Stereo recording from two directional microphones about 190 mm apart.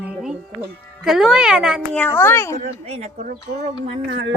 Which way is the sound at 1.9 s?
10° left (ahead or behind).